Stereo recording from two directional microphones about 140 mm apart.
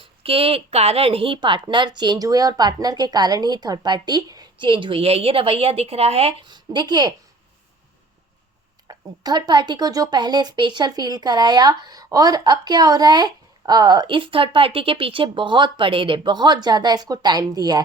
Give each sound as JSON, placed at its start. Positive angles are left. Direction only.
{"t": 0.0, "sound": "a woman's voice", "side_deg": -40}
{"t": 6.4, "sound": "a woman's voice", "side_deg": -30}
{"t": 8.9, "sound": "a woman's voice", "side_deg": -30}